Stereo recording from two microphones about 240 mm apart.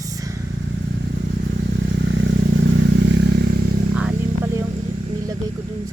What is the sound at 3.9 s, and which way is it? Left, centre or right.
Vehicle, centre.